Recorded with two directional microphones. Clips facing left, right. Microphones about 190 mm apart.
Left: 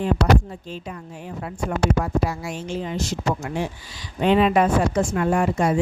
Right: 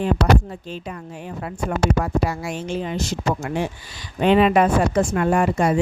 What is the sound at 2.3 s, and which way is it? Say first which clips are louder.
A woman's voice: right 2 dB; 65° right (ahead or behind).